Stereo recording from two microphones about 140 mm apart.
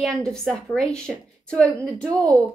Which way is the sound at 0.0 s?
5° left (ahead or behind).